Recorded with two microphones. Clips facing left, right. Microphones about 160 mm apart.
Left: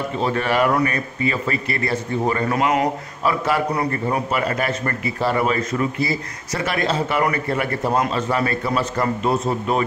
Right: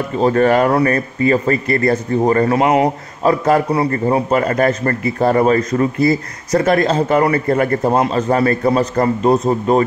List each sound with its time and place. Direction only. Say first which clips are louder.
0.2 s speech: right 7 dB; 45° right (ahead or behind); by 2.9 s 30° right (ahead or behind)
3.3 s a man's voice: right 7 dB; 45° right (ahead or behind)